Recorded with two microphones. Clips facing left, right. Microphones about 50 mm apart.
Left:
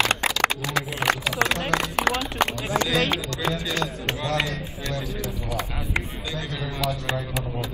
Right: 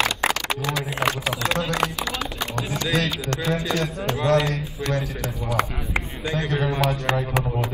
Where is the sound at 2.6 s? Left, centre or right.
Left.